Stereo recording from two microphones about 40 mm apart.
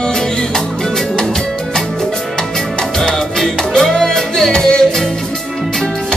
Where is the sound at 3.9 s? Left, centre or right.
Centre.